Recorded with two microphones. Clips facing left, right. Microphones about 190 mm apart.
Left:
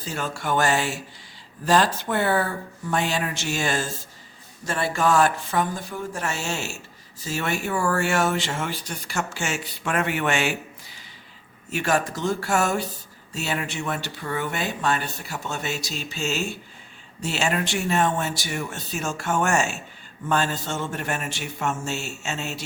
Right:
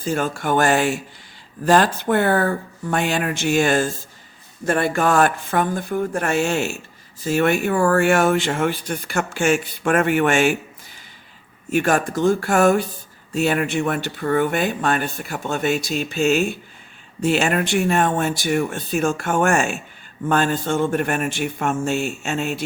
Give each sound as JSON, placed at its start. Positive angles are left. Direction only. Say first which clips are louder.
{"t": 0.0, "sound": "speech", "louder": "right 7 dB", "side_deg": -50}
{"t": 11.7, "sound": "speech", "louder": "right 5 dB", "side_deg": -50}